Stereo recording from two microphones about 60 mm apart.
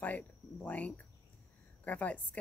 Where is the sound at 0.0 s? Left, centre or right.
Left.